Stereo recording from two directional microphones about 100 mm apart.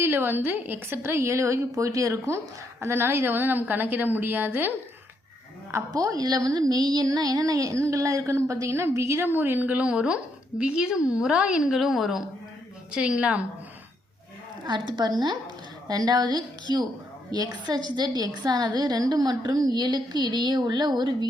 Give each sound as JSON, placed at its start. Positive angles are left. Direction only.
{"t": 0.0, "sound": "a woman's voice", "side_deg": -25}
{"t": 5.9, "sound": "a woman's voice", "side_deg": -35}
{"t": 14.7, "sound": "a woman's voice", "side_deg": -50}